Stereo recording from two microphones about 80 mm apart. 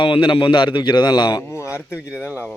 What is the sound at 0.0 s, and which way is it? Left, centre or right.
A man's voice, left.